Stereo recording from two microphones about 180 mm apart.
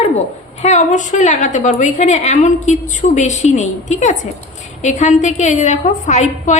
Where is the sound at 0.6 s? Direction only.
40° left (ahead or behind).